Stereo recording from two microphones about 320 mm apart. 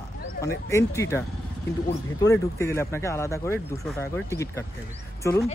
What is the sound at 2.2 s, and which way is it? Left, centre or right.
Speech, centre.